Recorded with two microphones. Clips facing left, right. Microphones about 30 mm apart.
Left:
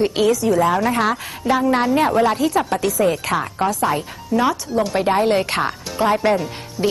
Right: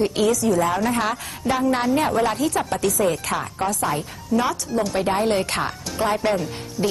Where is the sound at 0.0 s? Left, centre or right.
Centre.